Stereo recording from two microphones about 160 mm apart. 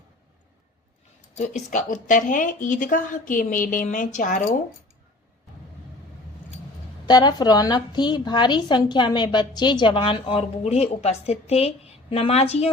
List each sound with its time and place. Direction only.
1.4 s speech: 50° left (ahead or behind)
7.1 s a woman's voice: 25° left (ahead or behind); by 12.7 s 40° left (ahead or behind)